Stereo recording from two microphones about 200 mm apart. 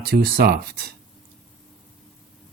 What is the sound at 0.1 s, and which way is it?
Speech, 50° right (ahead or behind).